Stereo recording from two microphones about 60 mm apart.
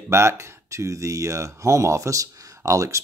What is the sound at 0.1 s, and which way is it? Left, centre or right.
Speech, right.